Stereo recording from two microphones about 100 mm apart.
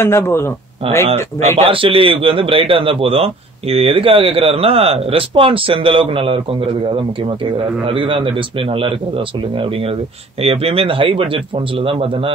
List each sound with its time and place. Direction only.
0.0 s speech: 25° left (ahead or behind)
1.6 s a man's voice: 65° right (ahead or behind)
10.4 s a man's voice: 75° right (ahead or behind)